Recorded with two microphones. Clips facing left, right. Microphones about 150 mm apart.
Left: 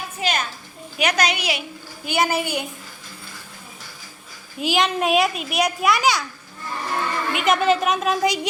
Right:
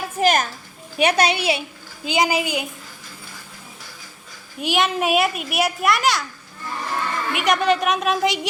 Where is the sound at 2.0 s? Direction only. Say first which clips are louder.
Right 1 dB; 15° right (ahead or behind).